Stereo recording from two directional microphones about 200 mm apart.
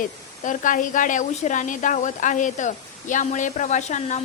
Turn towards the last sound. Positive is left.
turn(degrees=35)  # may be behind; listen again after turning